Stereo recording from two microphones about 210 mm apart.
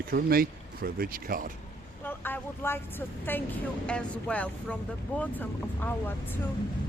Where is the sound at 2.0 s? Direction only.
10° left (ahead or behind).